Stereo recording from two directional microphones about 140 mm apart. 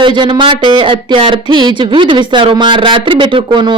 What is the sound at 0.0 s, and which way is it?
A woman's voice, 35° right (ahead or behind).